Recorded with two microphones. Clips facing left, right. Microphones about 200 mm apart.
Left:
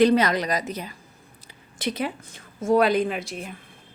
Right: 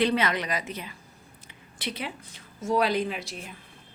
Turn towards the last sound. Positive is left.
turn(degrees=50)  # may be behind; listen again after turning